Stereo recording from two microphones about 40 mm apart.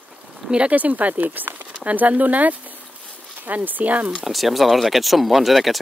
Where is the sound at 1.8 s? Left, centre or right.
Right.